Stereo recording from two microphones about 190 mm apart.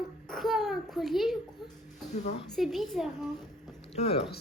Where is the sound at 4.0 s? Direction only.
35° left (ahead or behind).